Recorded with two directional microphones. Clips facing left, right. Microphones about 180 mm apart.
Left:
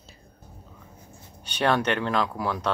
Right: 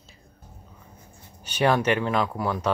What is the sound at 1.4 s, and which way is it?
Speech, 5° right (ahead or behind).